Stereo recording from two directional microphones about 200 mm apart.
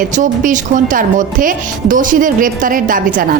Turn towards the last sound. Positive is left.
turn(degrees=-45)  # may be behind; listen again after turning